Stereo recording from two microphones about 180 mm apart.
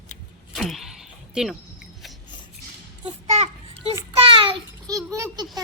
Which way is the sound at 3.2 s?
35° right (ahead or behind).